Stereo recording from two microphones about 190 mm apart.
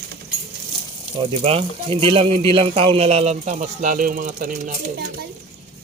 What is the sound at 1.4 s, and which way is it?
Speech, 30° right (ahead or behind).